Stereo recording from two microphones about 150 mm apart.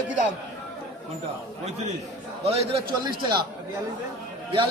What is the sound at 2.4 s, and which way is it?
Speech, 40° right (ahead or behind).